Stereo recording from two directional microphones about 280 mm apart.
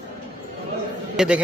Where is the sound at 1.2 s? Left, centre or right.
Centre.